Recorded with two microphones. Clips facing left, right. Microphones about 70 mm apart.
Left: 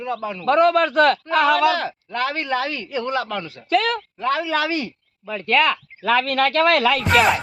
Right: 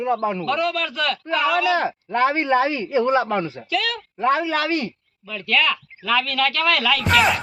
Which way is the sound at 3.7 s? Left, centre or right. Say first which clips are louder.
Left 6 dB; left.